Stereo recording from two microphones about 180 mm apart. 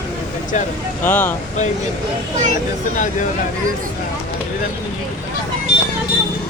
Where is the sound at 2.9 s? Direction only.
45° left (ahead or behind).